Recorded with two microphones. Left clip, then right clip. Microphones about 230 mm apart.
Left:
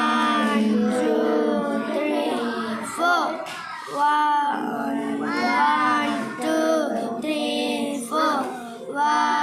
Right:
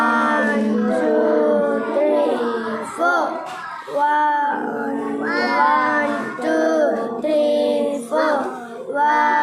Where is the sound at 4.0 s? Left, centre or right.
Left.